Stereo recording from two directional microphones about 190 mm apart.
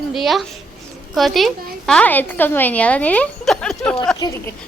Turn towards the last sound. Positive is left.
turn(degrees=15)  # may be behind; listen again after turning